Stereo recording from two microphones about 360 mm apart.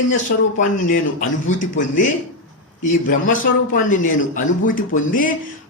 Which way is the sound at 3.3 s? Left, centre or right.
Left.